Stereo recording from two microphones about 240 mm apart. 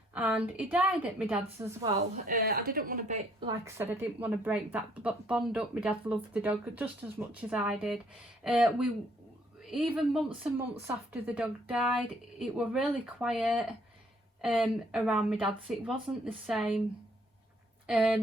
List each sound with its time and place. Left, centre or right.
0.1 s a woman's voice: centre
2.2 s speech: right
3.4 s a woman's voice: centre
17.8 s a woman's voice: centre